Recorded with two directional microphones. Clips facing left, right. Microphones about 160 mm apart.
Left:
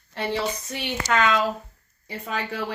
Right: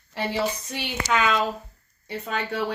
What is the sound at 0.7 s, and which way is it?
Speech, 5° right (ahead or behind).